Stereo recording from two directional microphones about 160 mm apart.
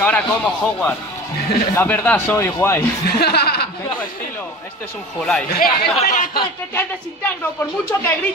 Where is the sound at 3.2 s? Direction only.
80° left.